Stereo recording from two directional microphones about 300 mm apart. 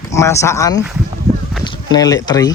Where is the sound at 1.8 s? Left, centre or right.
Centre.